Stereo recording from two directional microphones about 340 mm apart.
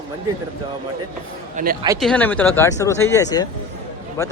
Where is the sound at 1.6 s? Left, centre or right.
Right.